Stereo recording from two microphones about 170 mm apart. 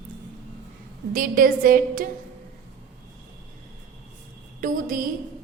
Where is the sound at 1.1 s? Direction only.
55° right (ahead or behind).